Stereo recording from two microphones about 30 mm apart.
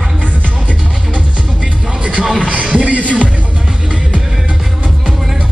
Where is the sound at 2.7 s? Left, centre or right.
Right.